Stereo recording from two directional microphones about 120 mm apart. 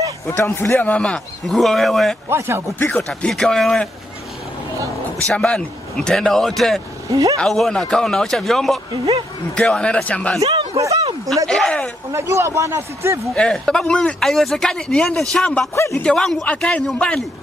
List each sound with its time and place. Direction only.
0.6 s speech: 15° left (ahead or behind)
2.2 s a man's voice: 20° right (ahead or behind)
2.8 s speech: 10° left (ahead or behind)
5.2 s speech: 10° left (ahead or behind)
7.1 s speech: 30° right (ahead or behind)
7.3 s speech: 5° left (ahead or behind)
10.4 s a sound: 40° right (ahead or behind)
10.8 s speech: 25° right (ahead or behind)
11.4 s speech: 5° left (ahead or behind)
12.1 s a man's voice: 25° right (ahead or behind)
13.3 s speech: 5° left (ahead or behind)